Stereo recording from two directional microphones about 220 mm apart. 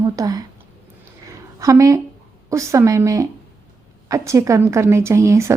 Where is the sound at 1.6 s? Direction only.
15° right (ahead or behind).